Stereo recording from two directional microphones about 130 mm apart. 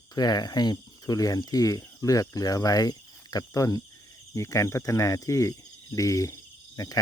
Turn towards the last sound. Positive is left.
turn(degrees=25)  # may be behind; listen again after turning